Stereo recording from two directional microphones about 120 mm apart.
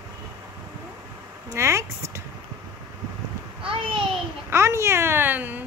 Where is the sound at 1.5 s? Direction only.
25° right (ahead or behind).